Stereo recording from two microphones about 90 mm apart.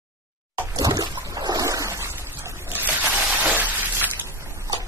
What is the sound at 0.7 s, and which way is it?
Boat, 45° right (ahead or behind).